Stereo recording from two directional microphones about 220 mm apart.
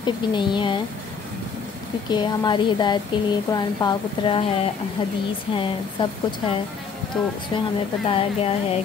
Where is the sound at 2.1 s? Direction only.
20° left (ahead or behind).